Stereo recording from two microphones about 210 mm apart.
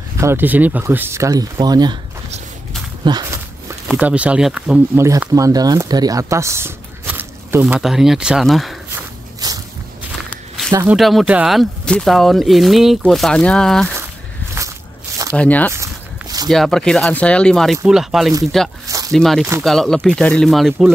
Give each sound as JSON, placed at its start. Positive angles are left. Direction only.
{"t": 0.2, "sound": "speech", "side_deg": -10}
{"t": 3.0, "sound": "speech", "side_deg": -20}
{"t": 3.9, "sound": "speech", "side_deg": -5}
{"t": 5.0, "sound": "speech", "side_deg": -15}
{"t": 9.4, "sound": "walk", "side_deg": -15}
{"t": 10.7, "sound": "speech", "side_deg": -15}
{"t": 11.0, "sound": "speech", "side_deg": 0}
{"t": 15.3, "sound": "speech", "side_deg": 5}
{"t": 15.7, "sound": "a sound", "side_deg": -15}
{"t": 16.4, "sound": "speech", "side_deg": 0}
{"t": 18.9, "sound": "squish", "side_deg": -15}
{"t": 19.1, "sound": "speech", "side_deg": 0}